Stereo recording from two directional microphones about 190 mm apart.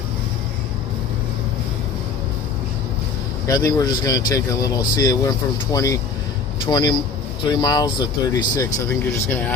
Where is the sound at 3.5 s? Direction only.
20° left (ahead or behind).